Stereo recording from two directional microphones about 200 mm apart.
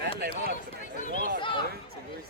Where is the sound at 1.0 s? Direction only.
40° left (ahead or behind).